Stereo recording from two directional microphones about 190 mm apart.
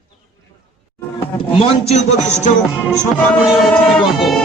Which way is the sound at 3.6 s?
Centre (ahead or behind).